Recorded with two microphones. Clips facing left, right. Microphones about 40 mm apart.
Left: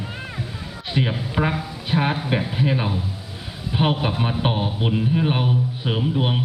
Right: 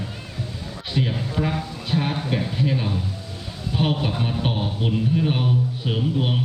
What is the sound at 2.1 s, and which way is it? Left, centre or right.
A man's voice, centre.